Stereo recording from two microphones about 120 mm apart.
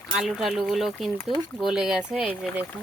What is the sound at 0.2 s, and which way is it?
Speech, 5° right (ahead or behind).